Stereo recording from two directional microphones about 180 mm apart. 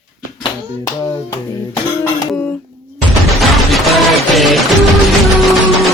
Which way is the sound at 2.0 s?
5° left (ahead or behind).